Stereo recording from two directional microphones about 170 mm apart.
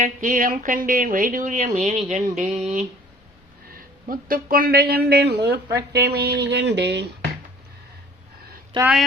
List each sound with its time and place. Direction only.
0.0 s speech: 50° right (ahead or behind)
4.1 s speech: 55° right (ahead or behind); by 7.0 s 85° right
8.7 s speech: 30° right (ahead or behind)